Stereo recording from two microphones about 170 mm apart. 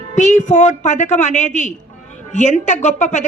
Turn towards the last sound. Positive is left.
turn(degrees=45)  # may be behind; listen again after turning